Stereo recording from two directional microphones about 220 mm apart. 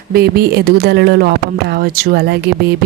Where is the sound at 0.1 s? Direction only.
45° right (ahead or behind).